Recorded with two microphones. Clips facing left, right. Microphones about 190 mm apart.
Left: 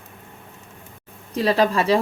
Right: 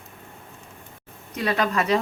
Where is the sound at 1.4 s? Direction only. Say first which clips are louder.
Left 5 dB; 30° left (ahead or behind).